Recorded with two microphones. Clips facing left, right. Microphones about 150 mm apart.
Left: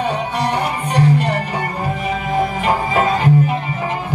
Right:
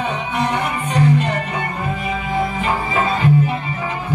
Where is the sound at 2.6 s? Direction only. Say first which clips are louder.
Left 3 dB; 45° left (ahead or behind).